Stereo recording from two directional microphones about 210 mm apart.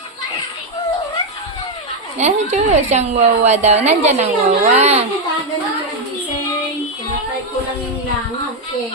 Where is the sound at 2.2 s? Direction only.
35° right (ahead or behind).